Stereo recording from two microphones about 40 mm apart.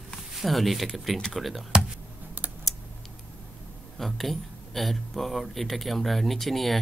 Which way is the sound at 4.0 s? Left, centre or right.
Centre.